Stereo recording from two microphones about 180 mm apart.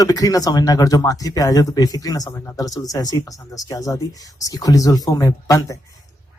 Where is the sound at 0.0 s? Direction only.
20° left (ahead or behind).